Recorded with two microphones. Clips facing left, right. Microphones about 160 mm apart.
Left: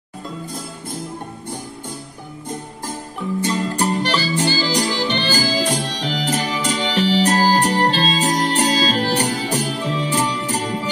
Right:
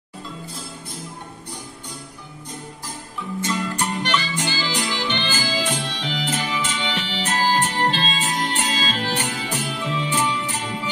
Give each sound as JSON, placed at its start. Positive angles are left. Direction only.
{"t": 3.3, "sound": "music", "side_deg": 35}